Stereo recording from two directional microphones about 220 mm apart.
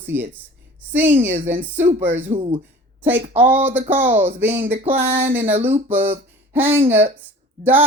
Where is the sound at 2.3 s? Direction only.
25° right (ahead or behind).